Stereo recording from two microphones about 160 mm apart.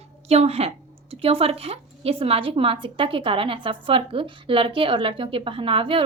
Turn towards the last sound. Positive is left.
turn(degrees=-35)  # may be behind; listen again after turning